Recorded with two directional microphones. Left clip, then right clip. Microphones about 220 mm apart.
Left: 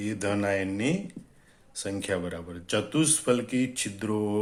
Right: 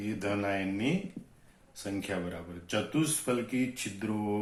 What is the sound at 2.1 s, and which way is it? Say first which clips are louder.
Speech: left 6 dB; 50° left (ahead or behind).